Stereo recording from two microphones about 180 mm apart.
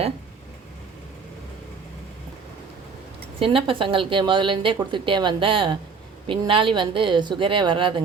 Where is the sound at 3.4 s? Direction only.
30° right (ahead or behind).